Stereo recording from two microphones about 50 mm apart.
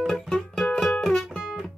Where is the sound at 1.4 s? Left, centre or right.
Centre.